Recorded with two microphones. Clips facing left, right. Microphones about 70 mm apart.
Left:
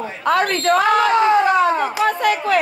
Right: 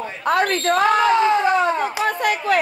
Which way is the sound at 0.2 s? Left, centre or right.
Left.